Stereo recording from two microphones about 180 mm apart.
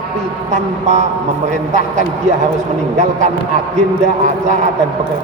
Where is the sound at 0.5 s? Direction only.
40° right (ahead or behind).